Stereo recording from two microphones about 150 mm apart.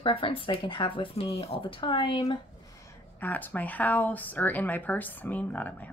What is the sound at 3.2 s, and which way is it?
A woman's voice, 10° left (ahead or behind).